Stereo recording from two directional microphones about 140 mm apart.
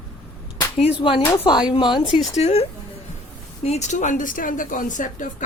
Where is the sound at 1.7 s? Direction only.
35° left (ahead or behind).